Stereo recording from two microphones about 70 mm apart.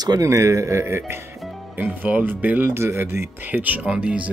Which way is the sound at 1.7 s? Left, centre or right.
Right.